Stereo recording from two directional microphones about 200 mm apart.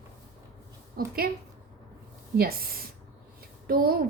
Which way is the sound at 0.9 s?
50° right (ahead or behind).